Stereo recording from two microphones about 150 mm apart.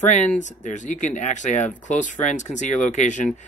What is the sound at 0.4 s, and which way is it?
Speech, 55° left (ahead or behind).